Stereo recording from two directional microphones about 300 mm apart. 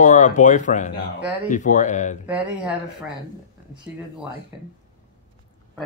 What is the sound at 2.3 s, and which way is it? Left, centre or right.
Speech, centre.